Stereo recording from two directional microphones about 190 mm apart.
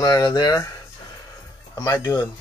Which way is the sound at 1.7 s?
20° left (ahead or behind).